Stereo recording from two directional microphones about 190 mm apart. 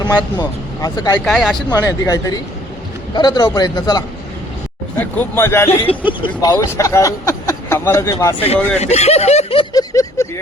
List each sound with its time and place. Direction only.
0.3 s speech: 20° left (ahead or behind)
1.2 s speech: centre (ahead or behind)
1.7 s a man's voice: 20° left (ahead or behind)
4.9 s speech: 10° left (ahead or behind)
6.1 s speech: 25° left (ahead or behind)
8.8 s speech: 35° left (ahead or behind)
9.9 s speech: 15° left (ahead or behind)